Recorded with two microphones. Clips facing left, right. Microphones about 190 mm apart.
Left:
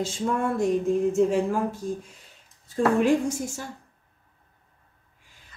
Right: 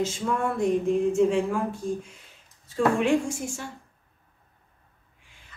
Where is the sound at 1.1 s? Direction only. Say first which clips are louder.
Even; 40° left (ahead or behind).